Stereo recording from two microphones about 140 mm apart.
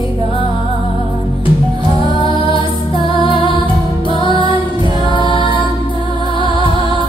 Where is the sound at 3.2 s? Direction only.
35° left (ahead or behind).